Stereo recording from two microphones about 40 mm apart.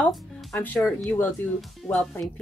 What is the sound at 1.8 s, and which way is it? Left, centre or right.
Speech, centre.